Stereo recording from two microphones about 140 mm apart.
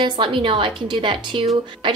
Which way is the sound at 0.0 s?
35° right (ahead or behind).